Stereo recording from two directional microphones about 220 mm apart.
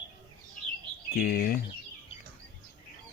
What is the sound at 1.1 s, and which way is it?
Speech, 40° left (ahead or behind).